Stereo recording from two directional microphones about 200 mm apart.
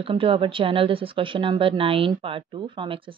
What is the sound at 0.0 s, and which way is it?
Speech, 25° right (ahead or behind).